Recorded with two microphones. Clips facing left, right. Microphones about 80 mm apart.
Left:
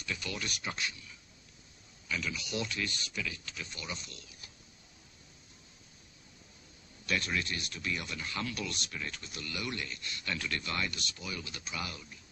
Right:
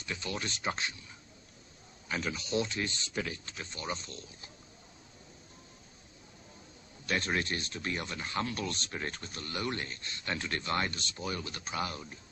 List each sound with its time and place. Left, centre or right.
0.0 s speech: right
3.2 s speech: right
7.1 s speech: right